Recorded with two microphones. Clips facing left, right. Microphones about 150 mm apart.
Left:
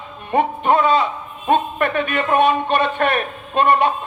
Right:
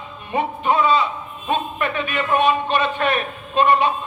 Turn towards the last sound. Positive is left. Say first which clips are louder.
# left 1 dB
turn(degrees=55)  # may be behind; listen again after turning